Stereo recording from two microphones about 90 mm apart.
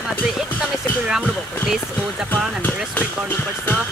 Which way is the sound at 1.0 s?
10° right (ahead or behind).